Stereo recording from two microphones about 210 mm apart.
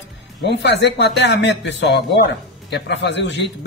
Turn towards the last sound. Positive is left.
turn(degrees=55)  # may be behind; listen again after turning